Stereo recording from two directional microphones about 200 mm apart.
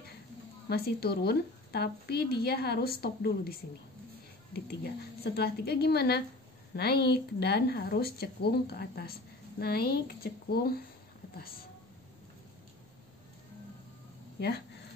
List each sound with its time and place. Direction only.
0.7 s speech: 50° left (ahead or behind)
5.2 s speech: 55° left (ahead or behind)